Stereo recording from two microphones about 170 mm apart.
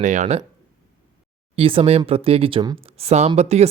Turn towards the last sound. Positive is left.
turn(degrees=-40)  # may be behind; listen again after turning